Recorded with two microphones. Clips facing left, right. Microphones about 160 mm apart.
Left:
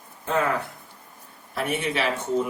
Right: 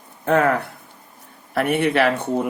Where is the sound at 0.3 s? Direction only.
65° right (ahead or behind).